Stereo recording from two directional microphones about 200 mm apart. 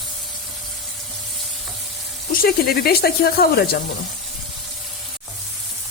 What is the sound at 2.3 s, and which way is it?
Speech, 50° left (ahead or behind).